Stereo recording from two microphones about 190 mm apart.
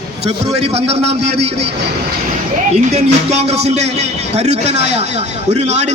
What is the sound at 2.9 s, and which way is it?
A man's voice, 35° right (ahead or behind).